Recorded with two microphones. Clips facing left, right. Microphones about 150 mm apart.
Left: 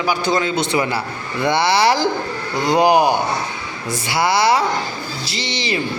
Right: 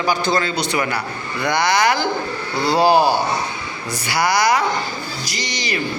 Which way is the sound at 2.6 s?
20° left (ahead or behind).